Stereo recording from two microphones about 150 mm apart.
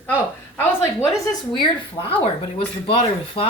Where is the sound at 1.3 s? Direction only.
30° left (ahead or behind).